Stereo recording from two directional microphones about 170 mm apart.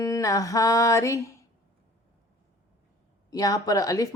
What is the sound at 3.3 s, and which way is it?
Speech, 20° left (ahead or behind).